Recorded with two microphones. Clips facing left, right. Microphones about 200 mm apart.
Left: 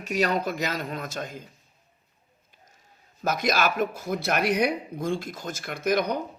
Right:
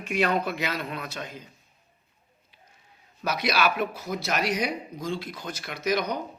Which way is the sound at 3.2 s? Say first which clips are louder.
Left 1 dB; 45° left (ahead or behind).